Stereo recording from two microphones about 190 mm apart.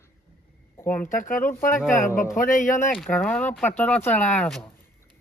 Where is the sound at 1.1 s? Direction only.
45° left (ahead or behind).